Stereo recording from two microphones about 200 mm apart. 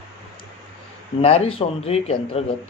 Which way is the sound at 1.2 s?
30° left (ahead or behind).